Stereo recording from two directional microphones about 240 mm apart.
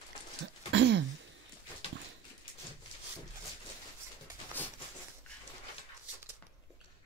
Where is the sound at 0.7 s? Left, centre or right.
Right.